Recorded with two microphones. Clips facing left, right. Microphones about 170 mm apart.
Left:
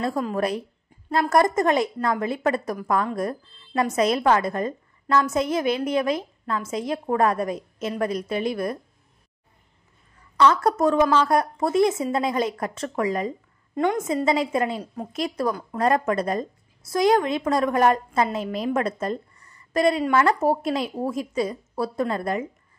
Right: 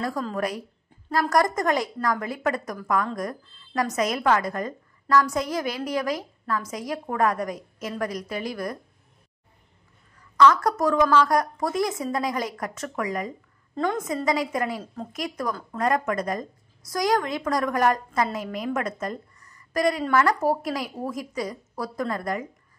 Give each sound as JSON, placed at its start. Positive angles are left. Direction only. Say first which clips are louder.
{"t": 0.4, "sound": "a woman's voice", "louder": "left 3 dB", "side_deg": 30}
{"t": 10.3, "sound": "a woman's voice", "louder": "even", "side_deg": 30}